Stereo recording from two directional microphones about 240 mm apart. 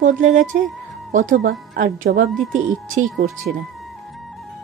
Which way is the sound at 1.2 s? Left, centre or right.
Right.